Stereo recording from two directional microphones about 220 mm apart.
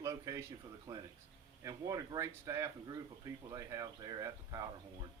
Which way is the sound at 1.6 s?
15° right (ahead or behind).